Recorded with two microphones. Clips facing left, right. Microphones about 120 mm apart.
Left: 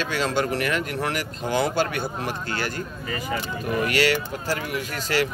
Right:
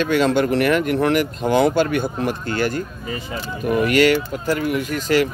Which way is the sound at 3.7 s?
45° right (ahead or behind).